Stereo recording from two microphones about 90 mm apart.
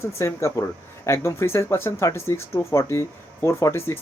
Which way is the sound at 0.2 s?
30° left (ahead or behind).